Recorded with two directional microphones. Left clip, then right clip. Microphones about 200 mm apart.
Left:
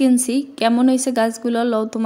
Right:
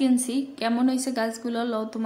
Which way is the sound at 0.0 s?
35° left (ahead or behind).